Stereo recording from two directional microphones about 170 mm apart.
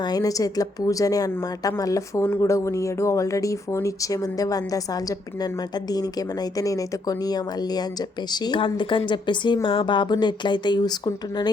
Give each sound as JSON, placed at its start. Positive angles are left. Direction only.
{"t": 0.0, "sound": "a woman's voice", "side_deg": 20}